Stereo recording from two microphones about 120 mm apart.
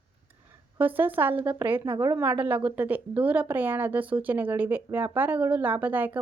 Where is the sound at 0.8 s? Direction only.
15° right (ahead or behind).